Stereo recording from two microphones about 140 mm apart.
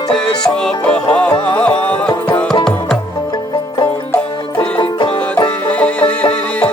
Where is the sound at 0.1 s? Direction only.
5° left (ahead or behind).